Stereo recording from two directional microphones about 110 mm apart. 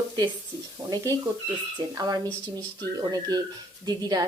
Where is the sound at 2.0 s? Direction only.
35° right (ahead or behind).